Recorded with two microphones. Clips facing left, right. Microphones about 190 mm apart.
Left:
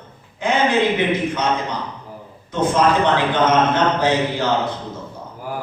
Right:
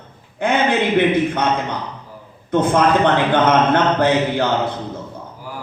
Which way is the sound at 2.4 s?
60° right (ahead or behind).